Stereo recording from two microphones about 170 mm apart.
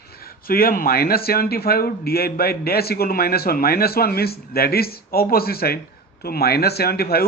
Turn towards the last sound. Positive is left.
turn(degrees=65)  # may be behind; listen again after turning